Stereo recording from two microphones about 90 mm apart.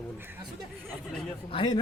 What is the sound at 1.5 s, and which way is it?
Speech, 70° left (ahead or behind).